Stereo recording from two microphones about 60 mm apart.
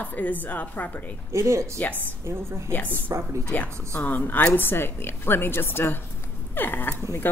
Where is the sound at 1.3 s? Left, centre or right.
Right.